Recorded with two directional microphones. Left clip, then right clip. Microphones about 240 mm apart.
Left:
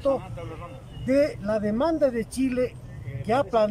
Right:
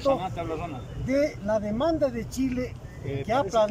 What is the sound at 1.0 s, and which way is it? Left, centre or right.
Speech, centre.